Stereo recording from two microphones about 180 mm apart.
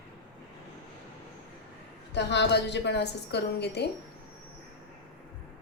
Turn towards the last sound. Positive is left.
turn(degrees=65)  # may be behind; listen again after turning